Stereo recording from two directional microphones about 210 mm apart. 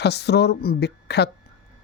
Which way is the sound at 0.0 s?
50° left (ahead or behind).